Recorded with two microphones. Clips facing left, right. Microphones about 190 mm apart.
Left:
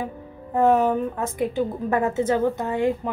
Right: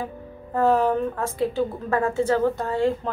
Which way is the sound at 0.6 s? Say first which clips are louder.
Left 1 dB; 20° left (ahead or behind).